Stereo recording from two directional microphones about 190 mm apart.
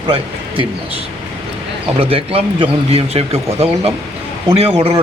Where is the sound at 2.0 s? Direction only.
30° right (ahead or behind).